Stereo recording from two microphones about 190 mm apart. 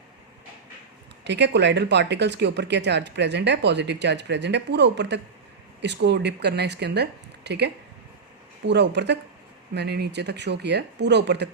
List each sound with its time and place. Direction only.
1.2 s speech: 65° right (ahead or behind)